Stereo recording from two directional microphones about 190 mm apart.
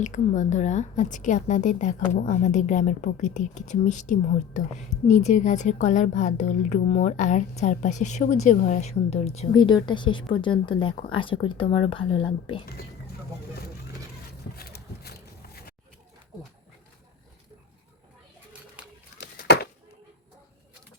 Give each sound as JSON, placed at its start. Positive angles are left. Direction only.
{"t": 0.0, "sound": "a woman's voice", "side_deg": 40}
{"t": 14.5, "sound": "horse", "side_deg": 55}
{"t": 19.2, "sound": "a sound", "side_deg": 60}